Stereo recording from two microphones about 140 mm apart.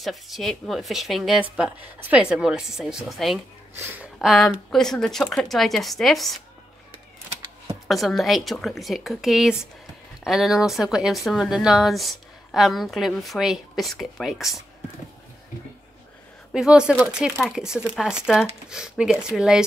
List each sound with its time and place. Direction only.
0.0 s speech: centre (ahead or behind)
7.9 s speech: centre (ahead or behind)
16.5 s speech: 5° right (ahead or behind)